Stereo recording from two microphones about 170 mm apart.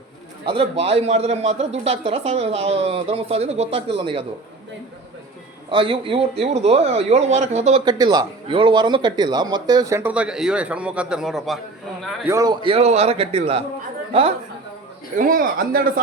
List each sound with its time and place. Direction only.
0.4 s a man's voice: 30° right (ahead or behind)
5.7 s a man's voice: 30° right (ahead or behind)
7.9 s speech: 25° right (ahead or behind); by 11.6 s centre (ahead or behind)
12.3 s a man's voice: 20° right (ahead or behind)
15.2 s speech: 55° right (ahead or behind)